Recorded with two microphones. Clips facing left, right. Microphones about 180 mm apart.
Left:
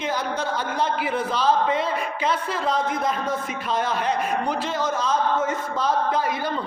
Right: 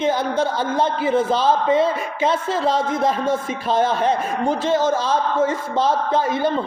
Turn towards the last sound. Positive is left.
turn(degrees=-25)  # may be behind; listen again after turning